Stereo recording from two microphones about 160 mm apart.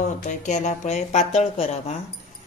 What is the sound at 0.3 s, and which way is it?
Speech, 50° left (ahead or behind).